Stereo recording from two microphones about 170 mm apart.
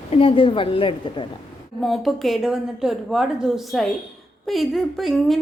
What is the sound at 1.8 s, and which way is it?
A woman's voice, centre (ahead or behind).